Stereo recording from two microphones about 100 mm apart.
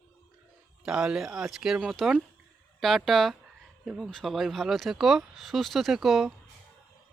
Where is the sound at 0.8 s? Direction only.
10° right (ahead or behind).